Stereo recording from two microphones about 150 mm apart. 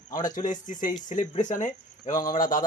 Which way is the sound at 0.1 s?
60° left (ahead or behind).